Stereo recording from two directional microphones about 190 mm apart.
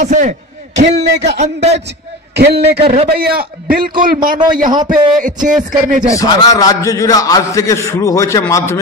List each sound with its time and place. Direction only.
0.0 s a man's voice: 40° right (ahead or behind)
0.9 s a man's voice: 65° right (ahead or behind)
1.4 s a man's voice: 35° right (ahead or behind)
2.3 s a man's voice: 60° right (ahead or behind)
2.8 s a man's voice: 35° right (ahead or behind)
3.2 s speech: 50° right (ahead or behind)
6.1 s a man's voice: 20° left (ahead or behind)